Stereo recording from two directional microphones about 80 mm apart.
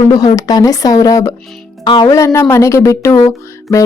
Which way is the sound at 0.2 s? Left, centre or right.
Left.